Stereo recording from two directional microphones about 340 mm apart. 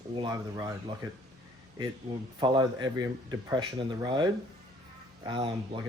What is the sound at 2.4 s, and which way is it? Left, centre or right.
Speech, centre.